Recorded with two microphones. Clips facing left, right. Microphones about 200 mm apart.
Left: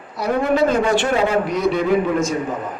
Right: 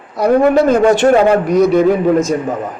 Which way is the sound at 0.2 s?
45° right (ahead or behind).